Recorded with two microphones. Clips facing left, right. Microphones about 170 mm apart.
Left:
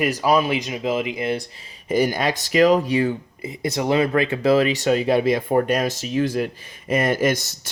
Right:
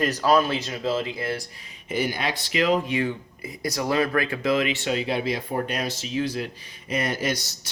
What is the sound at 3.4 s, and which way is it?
Speech, 25° left (ahead or behind).